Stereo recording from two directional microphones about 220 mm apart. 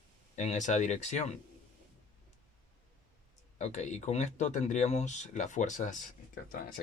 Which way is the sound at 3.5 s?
30° left (ahead or behind).